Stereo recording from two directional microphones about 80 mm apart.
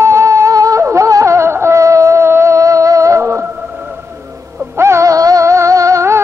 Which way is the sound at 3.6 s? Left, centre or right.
Centre.